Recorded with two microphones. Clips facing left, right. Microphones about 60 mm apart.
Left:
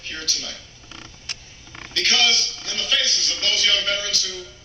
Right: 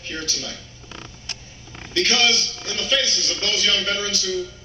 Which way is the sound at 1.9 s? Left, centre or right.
Right.